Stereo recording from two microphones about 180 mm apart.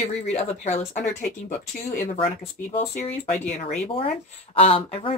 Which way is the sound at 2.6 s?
40° left (ahead or behind).